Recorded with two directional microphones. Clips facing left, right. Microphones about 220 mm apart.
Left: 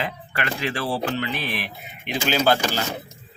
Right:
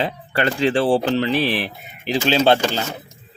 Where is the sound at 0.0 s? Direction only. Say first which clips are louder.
Right 7 dB; 30° right (ahead or behind).